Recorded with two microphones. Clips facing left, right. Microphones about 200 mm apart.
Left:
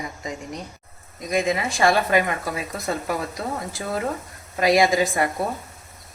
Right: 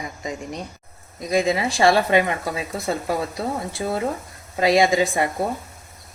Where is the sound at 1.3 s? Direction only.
30° right (ahead or behind).